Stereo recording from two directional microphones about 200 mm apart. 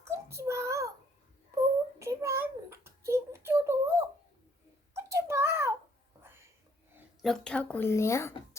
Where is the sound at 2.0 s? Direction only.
15° right (ahead or behind).